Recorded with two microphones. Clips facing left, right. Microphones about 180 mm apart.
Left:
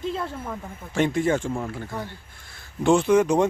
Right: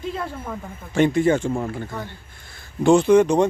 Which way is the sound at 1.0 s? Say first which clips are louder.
Right 4 dB; centre (ahead or behind).